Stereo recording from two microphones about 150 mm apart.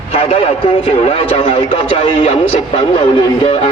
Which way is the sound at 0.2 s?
40° left (ahead or behind).